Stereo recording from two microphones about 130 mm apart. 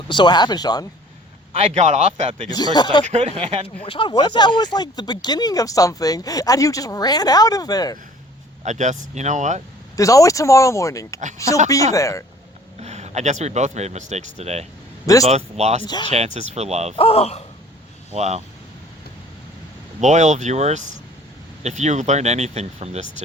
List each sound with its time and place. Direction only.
0.1 s speech: 35° left (ahead or behind)
1.5 s speech: 60° right (ahead or behind)
2.7 s speech: 35° left (ahead or behind)
3.1 s speech: 55° right (ahead or behind)
3.8 s speech: 40° left (ahead or behind)
8.6 s speech: 65° right (ahead or behind)
9.9 s speech: 25° left (ahead or behind)
12.8 s speech: 60° right (ahead or behind)
15.8 s speech: 35° left (ahead or behind)
16.0 s speech: 55° right (ahead or behind)
17.0 s speech: 50° left (ahead or behind)
18.1 s speech: 55° right (ahead or behind)
20.0 s speech: 65° right (ahead or behind)